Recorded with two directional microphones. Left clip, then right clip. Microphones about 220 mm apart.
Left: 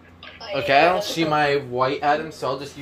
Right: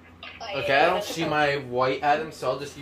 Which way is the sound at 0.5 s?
35° left (ahead or behind).